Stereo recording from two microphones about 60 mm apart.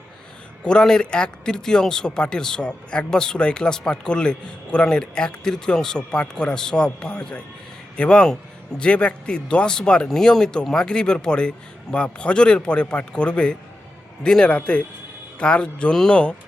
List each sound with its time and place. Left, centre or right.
0.6 s speech: centre